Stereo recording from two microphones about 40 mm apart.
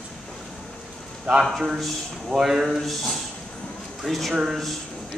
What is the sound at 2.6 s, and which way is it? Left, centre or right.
A man's voice, centre.